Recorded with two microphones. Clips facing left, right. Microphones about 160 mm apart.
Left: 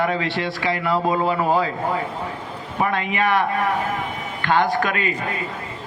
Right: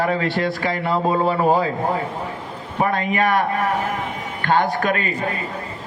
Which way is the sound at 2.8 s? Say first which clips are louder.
Right 2 dB; 40° right (ahead or behind).